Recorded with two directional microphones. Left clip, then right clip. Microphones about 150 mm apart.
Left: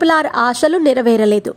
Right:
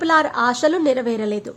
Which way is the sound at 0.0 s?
35° left (ahead or behind).